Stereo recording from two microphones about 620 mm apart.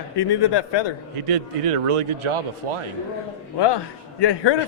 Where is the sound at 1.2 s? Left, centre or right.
Right.